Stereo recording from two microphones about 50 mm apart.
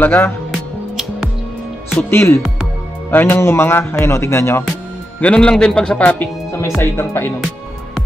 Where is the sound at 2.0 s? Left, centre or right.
Left.